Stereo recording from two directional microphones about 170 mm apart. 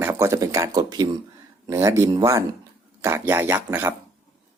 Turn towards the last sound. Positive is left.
turn(degrees=-15)  # may be behind; listen again after turning